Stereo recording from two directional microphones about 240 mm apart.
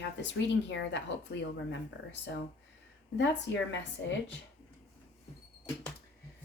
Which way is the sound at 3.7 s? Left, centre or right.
Left.